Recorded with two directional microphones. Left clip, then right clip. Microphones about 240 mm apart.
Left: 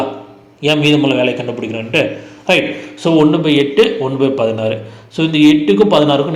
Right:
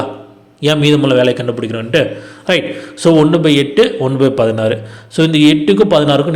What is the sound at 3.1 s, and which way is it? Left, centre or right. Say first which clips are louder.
A man's voice: right 2 dB; right.